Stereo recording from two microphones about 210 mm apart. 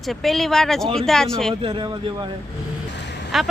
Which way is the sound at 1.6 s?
25° right (ahead or behind).